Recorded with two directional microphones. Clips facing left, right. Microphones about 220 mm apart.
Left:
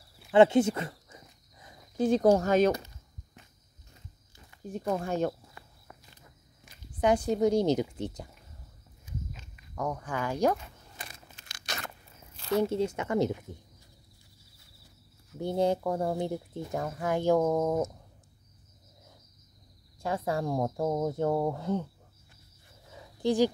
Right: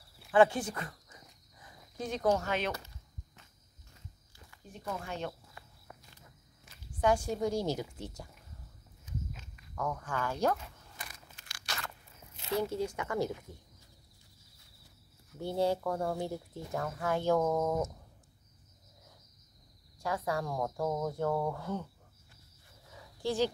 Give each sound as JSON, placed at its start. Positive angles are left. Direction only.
{"t": 0.3, "sound": "a sound", "side_deg": 25}
{"t": 2.3, "sound": "speech", "side_deg": 40}
{"t": 4.7, "sound": "speech", "side_deg": 45}
{"t": 6.6, "sound": "speech", "side_deg": 15}
{"t": 9.1, "sound": "walk", "side_deg": 10}
{"t": 9.8, "sound": "speech", "side_deg": 15}
{"t": 11.0, "sound": "a sound", "side_deg": 25}
{"t": 12.5, "sound": "speech", "side_deg": 25}
{"t": 15.3, "sound": "speech", "side_deg": 20}
{"t": 17.6, "sound": "speech", "side_deg": 25}
{"t": 20.0, "sound": "speech", "side_deg": 25}
{"t": 22.9, "sound": "a sound", "side_deg": 15}